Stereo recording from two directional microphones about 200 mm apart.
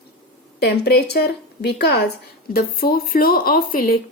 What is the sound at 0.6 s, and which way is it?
Speech, 55° left (ahead or behind).